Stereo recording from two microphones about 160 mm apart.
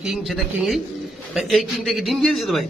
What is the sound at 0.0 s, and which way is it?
A man's voice, 5° right (ahead or behind).